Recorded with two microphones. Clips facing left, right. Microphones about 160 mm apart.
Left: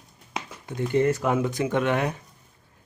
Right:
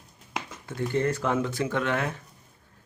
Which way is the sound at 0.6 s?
15° left (ahead or behind).